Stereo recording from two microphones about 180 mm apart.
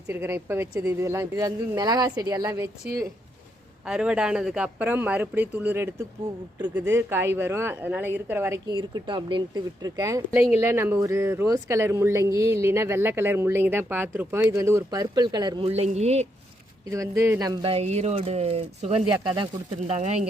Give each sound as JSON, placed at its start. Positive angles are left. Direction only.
{"t": 0.1, "sound": "speech", "side_deg": -15}
{"t": 3.8, "sound": "speech", "side_deg": -5}
{"t": 8.6, "sound": "speech", "side_deg": -25}
{"t": 10.3, "sound": "speech", "side_deg": -10}
{"t": 16.9, "sound": "speech", "side_deg": -15}